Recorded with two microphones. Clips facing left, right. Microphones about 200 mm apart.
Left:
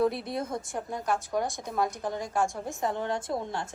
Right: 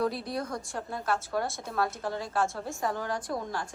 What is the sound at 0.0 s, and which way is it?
A woman's voice, 25° left (ahead or behind).